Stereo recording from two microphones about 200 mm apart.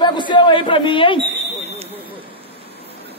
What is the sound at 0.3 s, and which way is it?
Speech, 25° left (ahead or behind).